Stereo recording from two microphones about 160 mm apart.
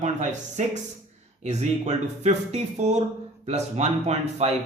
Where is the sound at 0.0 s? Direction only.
45° right (ahead or behind).